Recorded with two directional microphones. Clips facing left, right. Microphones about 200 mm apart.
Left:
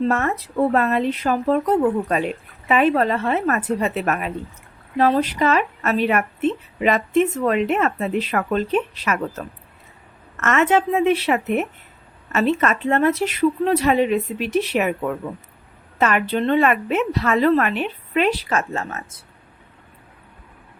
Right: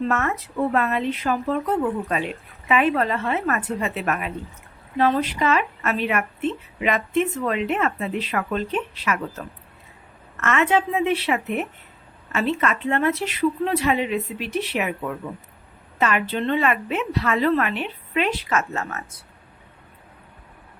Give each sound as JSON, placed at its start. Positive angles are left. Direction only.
{"t": 0.1, "sound": "speech", "side_deg": 35}
{"t": 10.4, "sound": "a woman's voice", "side_deg": 45}
{"t": 16.0, "sound": "a woman's voice", "side_deg": 45}